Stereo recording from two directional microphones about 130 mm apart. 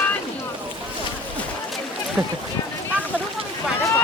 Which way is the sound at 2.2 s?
20° right (ahead or behind).